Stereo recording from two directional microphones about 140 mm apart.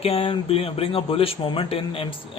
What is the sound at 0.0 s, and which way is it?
Speech, 45° left (ahead or behind).